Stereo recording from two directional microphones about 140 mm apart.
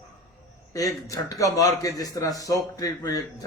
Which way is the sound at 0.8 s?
25° left (ahead or behind).